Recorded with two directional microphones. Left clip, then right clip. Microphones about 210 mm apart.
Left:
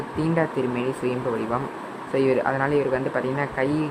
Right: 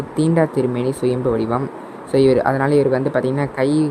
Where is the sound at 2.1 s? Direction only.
35° right (ahead or behind).